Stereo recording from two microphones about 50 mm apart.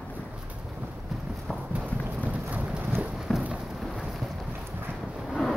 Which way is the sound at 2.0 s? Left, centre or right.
Right.